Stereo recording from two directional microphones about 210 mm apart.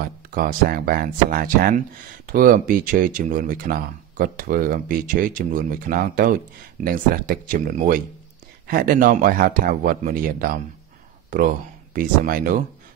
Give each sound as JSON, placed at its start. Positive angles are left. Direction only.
{"t": 0.3, "sound": "speech", "side_deg": -40}